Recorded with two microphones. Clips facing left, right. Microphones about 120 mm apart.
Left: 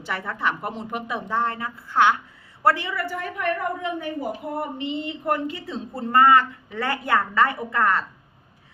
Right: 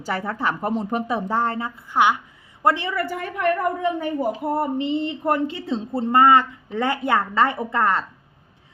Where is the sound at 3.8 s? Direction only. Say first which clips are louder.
Right 5 dB; 35° right (ahead or behind).